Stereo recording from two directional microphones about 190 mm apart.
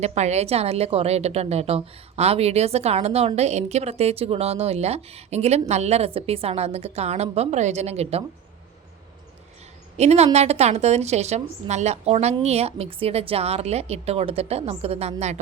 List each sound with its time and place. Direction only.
0.0 s a woman's voice: 35° right (ahead or behind)
10.0 s a woman's voice: 35° right (ahead or behind)